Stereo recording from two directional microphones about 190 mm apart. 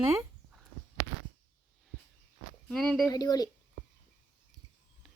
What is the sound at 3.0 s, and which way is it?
Speech, 20° left (ahead or behind).